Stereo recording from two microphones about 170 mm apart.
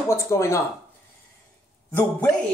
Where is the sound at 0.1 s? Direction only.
15° left (ahead or behind).